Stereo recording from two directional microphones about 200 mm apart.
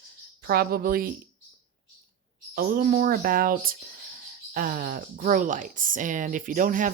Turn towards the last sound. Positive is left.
turn(degrees=-40)  # may be behind; listen again after turning